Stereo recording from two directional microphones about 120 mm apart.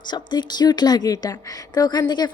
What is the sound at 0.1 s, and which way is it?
A woman's voice, 40° left (ahead or behind).